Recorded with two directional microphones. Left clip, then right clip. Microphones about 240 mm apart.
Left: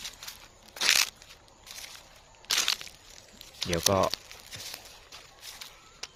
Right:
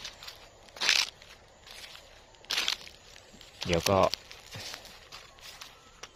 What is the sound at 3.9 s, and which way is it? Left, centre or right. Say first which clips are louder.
Speech: even; centre.